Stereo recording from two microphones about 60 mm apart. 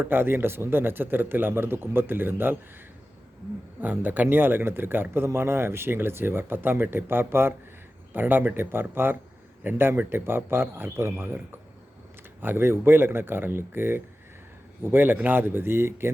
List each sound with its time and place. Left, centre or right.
0.0 s speech: right
3.8 s speech: right